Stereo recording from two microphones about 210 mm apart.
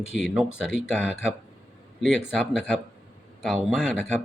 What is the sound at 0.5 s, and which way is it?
Speech, 60° left (ahead or behind).